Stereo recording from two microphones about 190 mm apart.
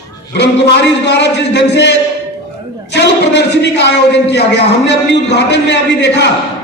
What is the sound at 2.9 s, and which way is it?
A man's voice, 65° left (ahead or behind).